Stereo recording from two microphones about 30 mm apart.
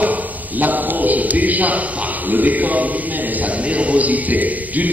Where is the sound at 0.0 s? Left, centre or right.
Right.